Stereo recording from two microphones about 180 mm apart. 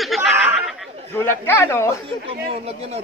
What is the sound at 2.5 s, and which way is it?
Speech, 35° right (ahead or behind).